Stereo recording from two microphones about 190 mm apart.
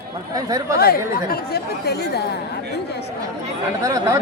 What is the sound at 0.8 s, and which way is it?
A man's voice, 55° left (ahead or behind).